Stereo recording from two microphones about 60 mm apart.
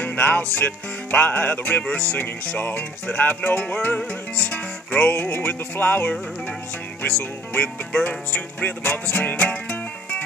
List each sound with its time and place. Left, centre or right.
0.0 s music: left
5.1 s music: left
7.5 s music: left